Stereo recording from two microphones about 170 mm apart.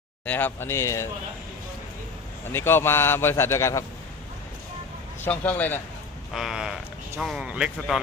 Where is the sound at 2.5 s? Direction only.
15° left (ahead or behind).